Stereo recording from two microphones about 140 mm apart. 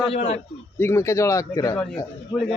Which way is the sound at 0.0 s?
45° left (ahead or behind).